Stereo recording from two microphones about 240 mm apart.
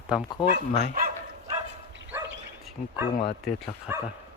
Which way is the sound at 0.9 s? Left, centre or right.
Right.